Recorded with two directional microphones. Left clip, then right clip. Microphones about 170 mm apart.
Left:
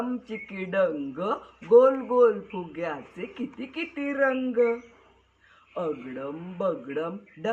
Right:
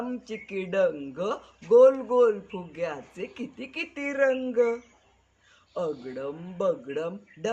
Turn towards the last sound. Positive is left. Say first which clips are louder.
# left 1 dB
turn(degrees=-40)  # may be behind; listen again after turning